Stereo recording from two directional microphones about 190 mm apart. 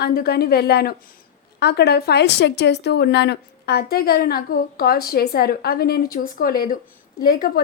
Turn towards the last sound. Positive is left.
turn(degrees=50)  # may be behind; listen again after turning